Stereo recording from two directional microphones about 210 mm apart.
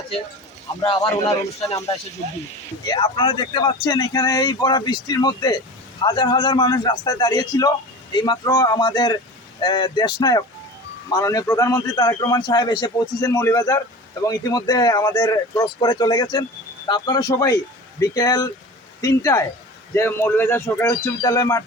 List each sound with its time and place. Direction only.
2.8 s a man's voice: 20° left (ahead or behind)